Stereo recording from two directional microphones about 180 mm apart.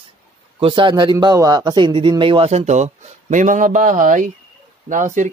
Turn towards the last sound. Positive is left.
turn(degrees=-45)  # may be behind; listen again after turning